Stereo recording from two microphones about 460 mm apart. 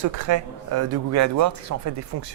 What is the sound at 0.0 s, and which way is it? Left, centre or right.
Speech, right.